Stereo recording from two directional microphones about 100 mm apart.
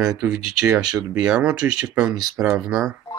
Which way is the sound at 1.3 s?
10° right (ahead or behind).